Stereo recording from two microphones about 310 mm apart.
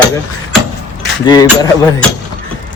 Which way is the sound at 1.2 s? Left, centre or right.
Centre.